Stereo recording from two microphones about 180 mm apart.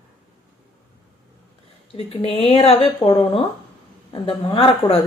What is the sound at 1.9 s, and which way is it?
A woman's voice, 30° left (ahead or behind).